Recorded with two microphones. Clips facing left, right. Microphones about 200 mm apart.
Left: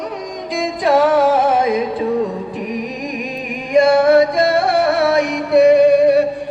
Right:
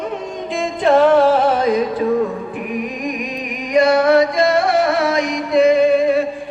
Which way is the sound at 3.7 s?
50° left (ahead or behind).